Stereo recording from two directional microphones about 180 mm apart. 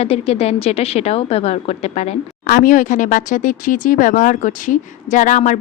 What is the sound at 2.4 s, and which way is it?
Speech, 50° left (ahead or behind).